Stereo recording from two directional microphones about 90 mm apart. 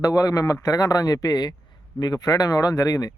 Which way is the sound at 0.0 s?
40° left (ahead or behind).